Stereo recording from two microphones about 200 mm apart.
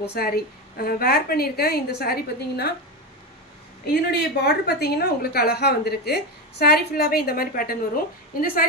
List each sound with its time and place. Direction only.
0.0 s a woman's voice: 50° left (ahead or behind)
4.1 s a woman's voice: 55° left (ahead or behind)